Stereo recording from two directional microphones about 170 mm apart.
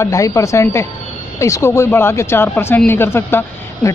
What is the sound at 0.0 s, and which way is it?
Speech, 20° left (ahead or behind).